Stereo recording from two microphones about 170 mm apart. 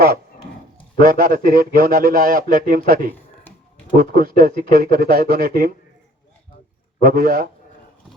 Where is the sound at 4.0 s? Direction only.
55° right (ahead or behind).